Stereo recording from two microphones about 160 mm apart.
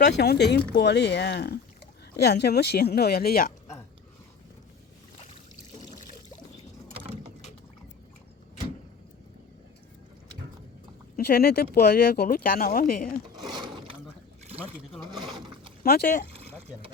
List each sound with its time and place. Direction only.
0.2 s speech: 90° left; by 3.5 s 70° left (ahead or behind)
11.2 s speech: 75° left (ahead or behind)
13.3 s a sound: 25° right (ahead or behind)
15.8 s speech: 70° left (ahead or behind)